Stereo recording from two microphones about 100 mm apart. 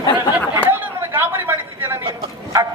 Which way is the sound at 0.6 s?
20° right (ahead or behind).